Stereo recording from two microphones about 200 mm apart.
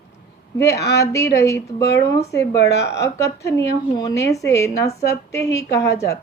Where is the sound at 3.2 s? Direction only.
15° left (ahead or behind).